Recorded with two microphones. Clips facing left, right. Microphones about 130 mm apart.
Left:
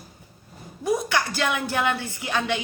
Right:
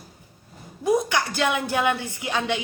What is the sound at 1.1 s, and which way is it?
Speech, 20° right (ahead or behind).